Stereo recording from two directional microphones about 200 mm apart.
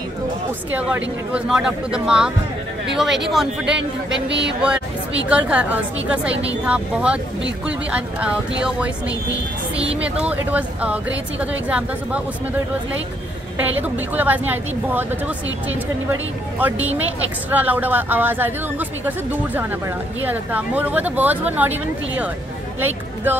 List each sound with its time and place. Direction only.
0.7 s speech: 5° right (ahead or behind)
4.3 s speech: 60° right (ahead or behind)
4.6 s speech: 5° right (ahead or behind)
10.2 s speech: 5° right (ahead or behind)
13.6 s speech: 10° right (ahead or behind)